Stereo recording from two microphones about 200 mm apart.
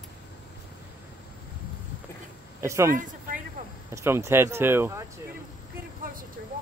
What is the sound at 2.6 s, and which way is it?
Speech, 15° right (ahead or behind).